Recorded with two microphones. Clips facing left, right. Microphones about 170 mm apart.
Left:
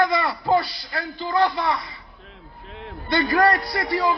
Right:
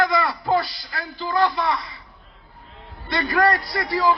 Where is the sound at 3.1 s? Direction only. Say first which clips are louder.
Left 1 dB; 25° left (ahead or behind).